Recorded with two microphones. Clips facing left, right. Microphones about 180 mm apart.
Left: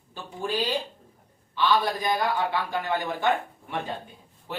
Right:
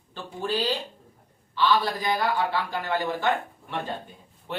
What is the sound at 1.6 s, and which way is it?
Speech, 15° left (ahead or behind).